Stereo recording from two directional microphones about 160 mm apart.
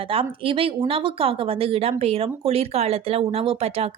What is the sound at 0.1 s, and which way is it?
Speech, 35° right (ahead or behind).